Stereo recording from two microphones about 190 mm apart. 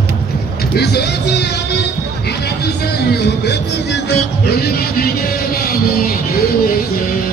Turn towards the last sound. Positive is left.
turn(degrees=50)  # may be behind; listen again after turning